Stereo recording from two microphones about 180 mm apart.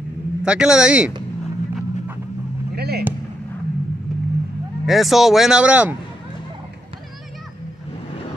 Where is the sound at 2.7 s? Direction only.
60° right (ahead or behind).